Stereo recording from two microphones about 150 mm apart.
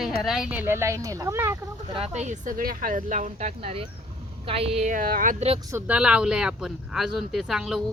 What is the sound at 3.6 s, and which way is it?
A woman's voice, 40° right (ahead or behind).